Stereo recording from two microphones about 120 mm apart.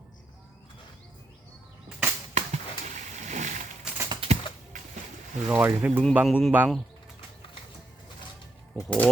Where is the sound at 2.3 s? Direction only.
75° right (ahead or behind); by 3.6 s 90° right.